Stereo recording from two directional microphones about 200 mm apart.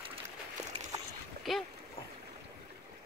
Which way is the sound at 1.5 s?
Centre (ahead or behind).